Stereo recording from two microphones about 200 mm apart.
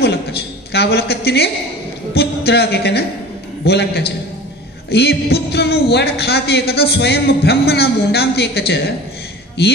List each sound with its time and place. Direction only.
0.7 s a man's voice: 50° left (ahead or behind)